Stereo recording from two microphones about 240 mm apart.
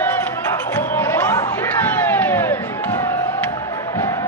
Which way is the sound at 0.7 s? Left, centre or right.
Centre.